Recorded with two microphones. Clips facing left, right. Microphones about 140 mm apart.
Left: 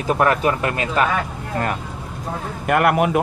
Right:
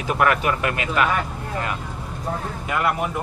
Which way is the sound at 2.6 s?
60° left (ahead or behind).